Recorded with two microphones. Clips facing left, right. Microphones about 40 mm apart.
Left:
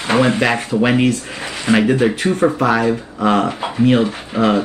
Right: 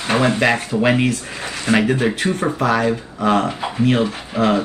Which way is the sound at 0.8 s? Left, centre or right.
Centre.